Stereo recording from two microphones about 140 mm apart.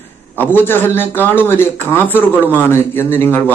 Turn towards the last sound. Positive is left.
turn(degrees=15)  # may be behind; listen again after turning